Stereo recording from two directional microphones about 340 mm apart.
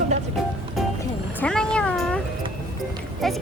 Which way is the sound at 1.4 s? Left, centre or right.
Centre.